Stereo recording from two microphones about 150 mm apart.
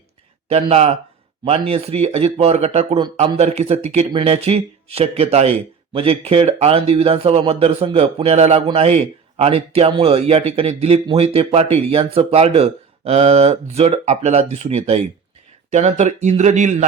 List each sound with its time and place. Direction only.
0.4 s speech: 45° right (ahead or behind)